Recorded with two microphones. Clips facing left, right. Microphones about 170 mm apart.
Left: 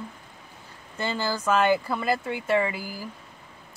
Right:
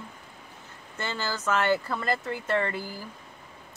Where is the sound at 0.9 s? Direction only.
15° left (ahead or behind).